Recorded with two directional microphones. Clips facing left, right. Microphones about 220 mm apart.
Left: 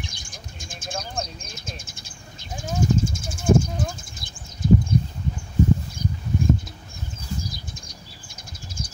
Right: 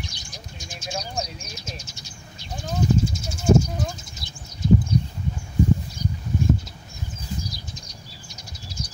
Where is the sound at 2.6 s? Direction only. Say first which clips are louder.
Even; 50° left (ahead or behind).